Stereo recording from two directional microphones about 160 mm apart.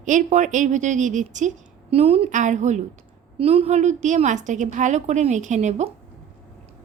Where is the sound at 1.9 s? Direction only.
40° right (ahead or behind).